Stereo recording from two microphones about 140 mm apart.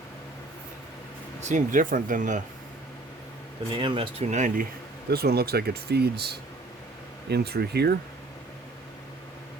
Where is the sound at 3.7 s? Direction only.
35° right (ahead or behind); by 4.6 s 60° right (ahead or behind).